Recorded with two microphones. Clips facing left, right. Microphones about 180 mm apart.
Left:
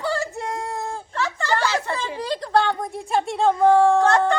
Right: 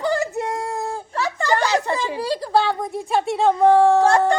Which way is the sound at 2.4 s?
5° right (ahead or behind).